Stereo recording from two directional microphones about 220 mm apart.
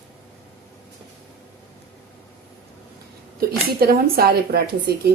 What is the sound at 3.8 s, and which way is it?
A woman's voice, 45° right (ahead or behind).